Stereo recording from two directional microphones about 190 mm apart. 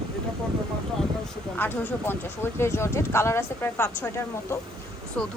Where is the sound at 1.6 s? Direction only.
10° left (ahead or behind).